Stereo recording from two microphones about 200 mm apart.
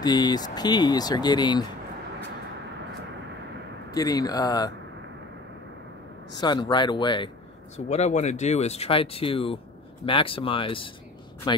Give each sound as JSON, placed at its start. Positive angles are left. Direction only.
{"t": 0.0, "sound": "speech", "side_deg": 20}
{"t": 3.9, "sound": "speech", "side_deg": 20}
{"t": 6.3, "sound": "speech", "side_deg": 20}
{"t": 7.9, "sound": "speech", "side_deg": 35}